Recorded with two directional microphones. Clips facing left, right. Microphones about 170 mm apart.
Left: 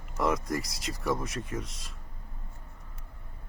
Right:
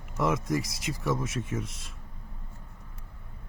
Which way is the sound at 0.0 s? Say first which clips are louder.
Right 1 dB; centre (ahead or behind).